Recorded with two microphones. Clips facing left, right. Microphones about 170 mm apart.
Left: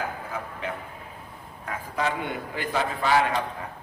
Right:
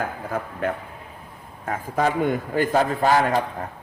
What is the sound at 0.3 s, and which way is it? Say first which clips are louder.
A man's voice: right 7 dB; 50° right (ahead or behind).